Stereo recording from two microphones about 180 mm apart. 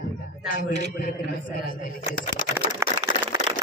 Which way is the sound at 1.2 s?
55° left (ahead or behind).